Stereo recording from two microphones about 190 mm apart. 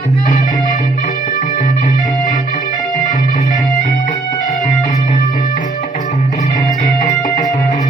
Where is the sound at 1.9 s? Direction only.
20° right (ahead or behind).